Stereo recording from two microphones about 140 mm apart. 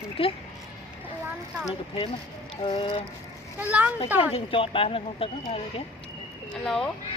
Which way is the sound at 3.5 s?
10° right (ahead or behind).